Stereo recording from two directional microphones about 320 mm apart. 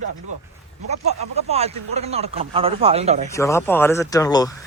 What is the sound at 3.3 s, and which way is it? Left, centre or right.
Speech, centre.